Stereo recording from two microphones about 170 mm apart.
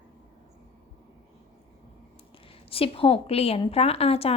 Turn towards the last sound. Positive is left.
turn(degrees=35)  # may be behind; listen again after turning